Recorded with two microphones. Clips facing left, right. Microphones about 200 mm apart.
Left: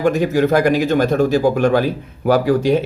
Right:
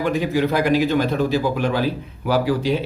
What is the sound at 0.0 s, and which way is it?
A man's voice, 45° left (ahead or behind).